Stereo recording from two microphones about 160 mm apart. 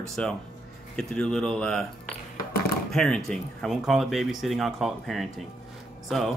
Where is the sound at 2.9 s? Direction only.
5° left (ahead or behind).